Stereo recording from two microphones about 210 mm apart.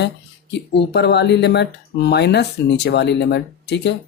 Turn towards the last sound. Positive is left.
turn(degrees=55)  # may be behind; listen again after turning